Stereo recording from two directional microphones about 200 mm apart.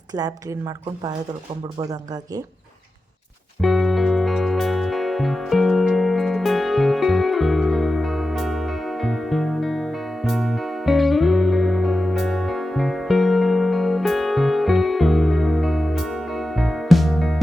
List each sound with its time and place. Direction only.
0.1 s speech: 20° right (ahead or behind)
1.8 s speech: 20° right (ahead or behind)
3.6 s music: centre (ahead or behind)